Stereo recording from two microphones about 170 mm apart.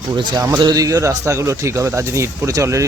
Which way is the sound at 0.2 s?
20° right (ahead or behind).